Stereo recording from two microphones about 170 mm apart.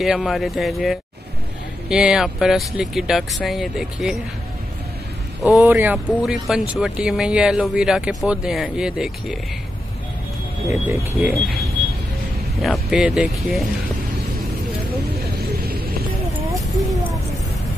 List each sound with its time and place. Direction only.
0.0 s speech: centre (ahead or behind)
5.4 s speech: 5° right (ahead or behind)
11.1 s speech: centre (ahead or behind)
12.6 s speech: centre (ahead or behind)
16.7 s a sound: centre (ahead or behind)